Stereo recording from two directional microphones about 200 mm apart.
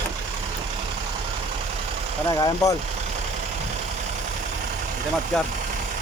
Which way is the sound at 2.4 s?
15° left (ahead or behind).